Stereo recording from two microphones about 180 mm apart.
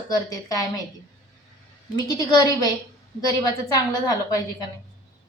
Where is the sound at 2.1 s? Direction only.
20° left (ahead or behind).